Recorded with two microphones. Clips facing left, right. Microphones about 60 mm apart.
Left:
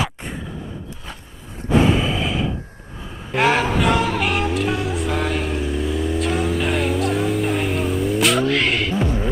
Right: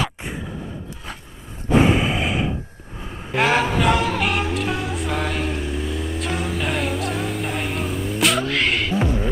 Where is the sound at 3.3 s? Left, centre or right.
Centre.